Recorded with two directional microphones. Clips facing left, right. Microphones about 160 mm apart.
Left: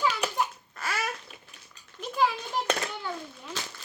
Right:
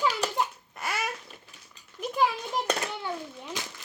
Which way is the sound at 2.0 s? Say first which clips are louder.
Right 1 dB; 15° right (ahead or behind).